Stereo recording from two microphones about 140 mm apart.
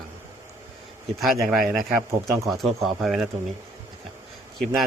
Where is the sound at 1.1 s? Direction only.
Centre (ahead or behind).